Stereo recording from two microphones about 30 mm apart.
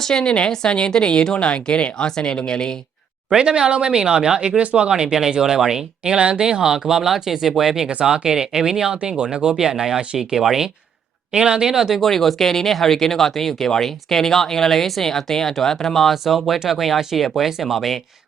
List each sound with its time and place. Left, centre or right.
0.1 s a woman's voice: left
3.3 s speech: right
4.4 s speech: right
4.9 s speech: right
6.4 s speech: centre
7.0 s speech: centre
9.1 s speech: right
9.6 s speech: centre
11.3 s speech: right; by 12.0 s centre
12.0 s speech: centre
16.1 s speech: centre